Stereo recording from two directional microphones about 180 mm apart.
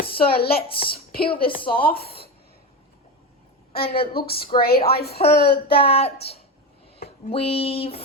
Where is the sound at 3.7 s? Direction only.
60° left (ahead or behind).